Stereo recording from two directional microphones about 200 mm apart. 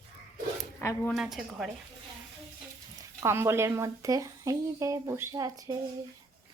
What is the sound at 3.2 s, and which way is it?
A woman's voice, 10° right (ahead or behind).